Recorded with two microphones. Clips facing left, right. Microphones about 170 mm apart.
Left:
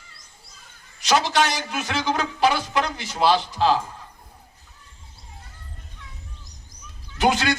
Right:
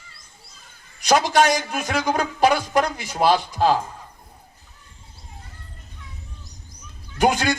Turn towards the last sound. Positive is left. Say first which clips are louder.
# right 1 dB
turn(degrees=-45)  # may be behind; listen again after turning